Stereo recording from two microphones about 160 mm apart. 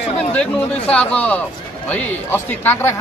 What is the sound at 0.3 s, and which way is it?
Speech, 10° left (ahead or behind).